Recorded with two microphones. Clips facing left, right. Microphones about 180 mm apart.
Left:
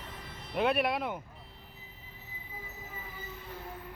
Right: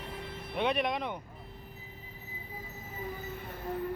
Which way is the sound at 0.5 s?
5° left (ahead or behind).